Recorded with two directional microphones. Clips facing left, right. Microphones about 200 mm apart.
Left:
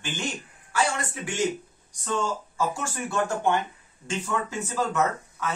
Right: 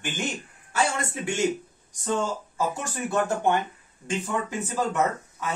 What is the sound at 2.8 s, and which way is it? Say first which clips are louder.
Speech: right 1 dB; 15° right (ahead or behind).